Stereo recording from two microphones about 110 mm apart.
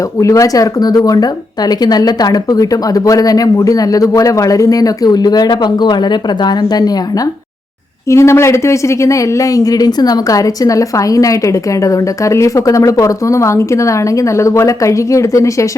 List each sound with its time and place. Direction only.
0.2 s speech: 30° left (ahead or behind)
8.1 s speech: 25° left (ahead or behind)